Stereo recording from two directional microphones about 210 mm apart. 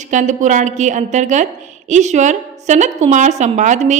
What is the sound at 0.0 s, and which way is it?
A woman's voice, 35° right (ahead or behind).